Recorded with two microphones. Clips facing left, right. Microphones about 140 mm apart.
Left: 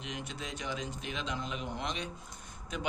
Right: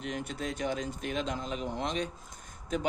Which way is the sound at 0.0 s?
45° right (ahead or behind).